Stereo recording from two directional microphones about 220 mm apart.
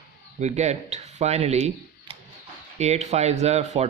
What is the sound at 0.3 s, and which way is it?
Speech, 30° right (ahead or behind).